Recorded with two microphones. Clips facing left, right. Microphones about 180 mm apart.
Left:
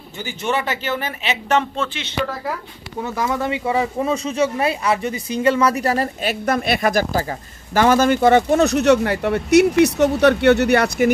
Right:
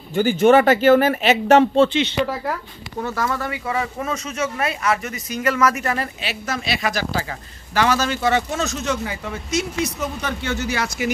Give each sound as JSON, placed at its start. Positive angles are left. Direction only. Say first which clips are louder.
{"t": 0.1, "sound": "speech", "louder": "right 10 dB", "side_deg": -50}
{"t": 3.0, "sound": "speech", "louder": "left 2 dB", "side_deg": 15}
{"t": 6.2, "sound": "speech", "louder": "left 7 dB", "side_deg": 55}